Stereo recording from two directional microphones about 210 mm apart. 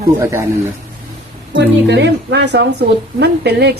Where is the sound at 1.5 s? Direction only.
55° right (ahead or behind).